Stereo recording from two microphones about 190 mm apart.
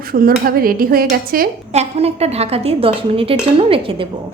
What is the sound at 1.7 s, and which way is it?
A woman's voice, 35° right (ahead or behind).